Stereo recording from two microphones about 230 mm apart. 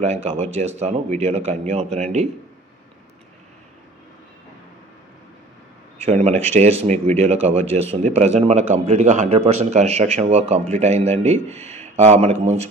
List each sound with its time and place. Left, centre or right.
0.0 s a man's voice: right
6.0 s a man's voice: right